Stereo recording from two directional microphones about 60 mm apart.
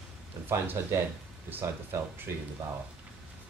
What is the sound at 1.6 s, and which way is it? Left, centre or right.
Speech, right.